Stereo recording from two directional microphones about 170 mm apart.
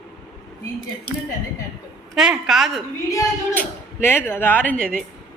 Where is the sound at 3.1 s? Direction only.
20° left (ahead or behind).